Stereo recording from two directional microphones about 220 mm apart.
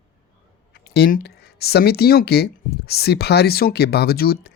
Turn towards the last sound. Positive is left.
turn(degrees=45)  # may be behind; listen again after turning